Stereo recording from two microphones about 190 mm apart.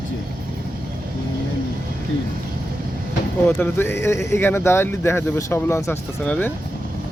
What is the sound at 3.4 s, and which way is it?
Speech, 10° left (ahead or behind).